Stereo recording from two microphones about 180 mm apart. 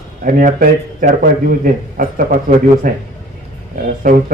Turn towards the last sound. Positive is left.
turn(degrees=-50)  # may be behind; listen again after turning